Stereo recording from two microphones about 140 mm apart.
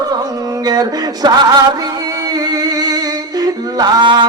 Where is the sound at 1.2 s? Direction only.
30° right (ahead or behind).